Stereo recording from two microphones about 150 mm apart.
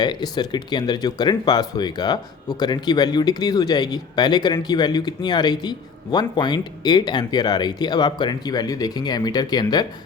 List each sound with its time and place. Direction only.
0.0 s speech: 30° left (ahead or behind)